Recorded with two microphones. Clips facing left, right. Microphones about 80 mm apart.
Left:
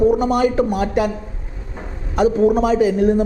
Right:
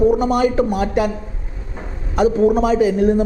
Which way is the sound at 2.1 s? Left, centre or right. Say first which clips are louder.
Even; right.